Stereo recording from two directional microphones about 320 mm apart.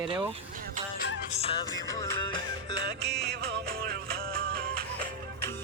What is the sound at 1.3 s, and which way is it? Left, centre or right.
Music, centre.